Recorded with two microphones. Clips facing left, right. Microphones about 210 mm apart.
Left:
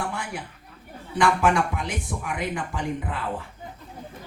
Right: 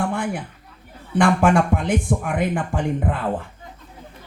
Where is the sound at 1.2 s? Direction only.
50° right (ahead or behind).